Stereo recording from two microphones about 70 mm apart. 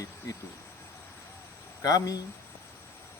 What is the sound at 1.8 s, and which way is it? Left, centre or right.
Speech, left.